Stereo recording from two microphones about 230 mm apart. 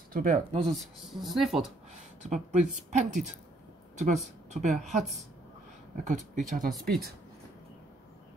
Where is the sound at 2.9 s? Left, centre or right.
Right.